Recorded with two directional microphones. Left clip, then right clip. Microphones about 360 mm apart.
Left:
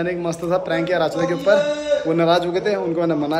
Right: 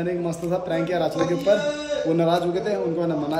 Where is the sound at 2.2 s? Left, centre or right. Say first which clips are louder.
Left 4 dB; left.